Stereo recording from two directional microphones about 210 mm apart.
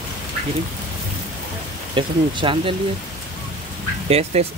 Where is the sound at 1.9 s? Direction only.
25° right (ahead or behind).